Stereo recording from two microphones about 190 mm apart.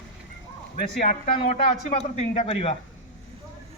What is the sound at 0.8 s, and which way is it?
Speech, 45° left (ahead or behind).